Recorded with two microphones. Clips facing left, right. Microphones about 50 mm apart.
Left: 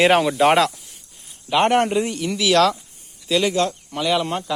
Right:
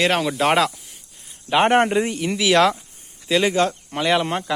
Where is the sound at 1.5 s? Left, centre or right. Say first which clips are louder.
Right 1 dB; right.